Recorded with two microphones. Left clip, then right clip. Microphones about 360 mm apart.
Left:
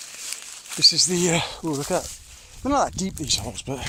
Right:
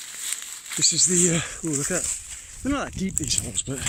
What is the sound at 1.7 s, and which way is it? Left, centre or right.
Speech, left.